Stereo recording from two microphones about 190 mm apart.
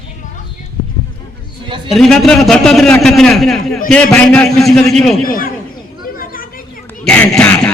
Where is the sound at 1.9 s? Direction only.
Centre (ahead or behind).